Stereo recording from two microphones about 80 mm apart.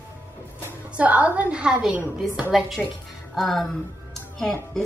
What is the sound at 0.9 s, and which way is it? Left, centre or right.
A woman's voice, centre.